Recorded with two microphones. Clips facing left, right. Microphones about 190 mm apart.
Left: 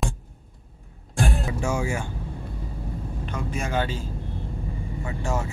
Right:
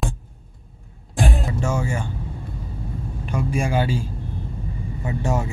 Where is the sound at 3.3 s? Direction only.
10° right (ahead or behind).